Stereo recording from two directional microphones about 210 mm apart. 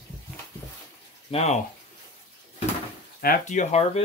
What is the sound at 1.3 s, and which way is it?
Speech, 30° left (ahead or behind).